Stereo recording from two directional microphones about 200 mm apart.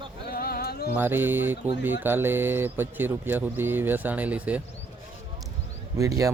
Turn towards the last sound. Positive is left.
turn(degrees=-15)  # may be behind; listen again after turning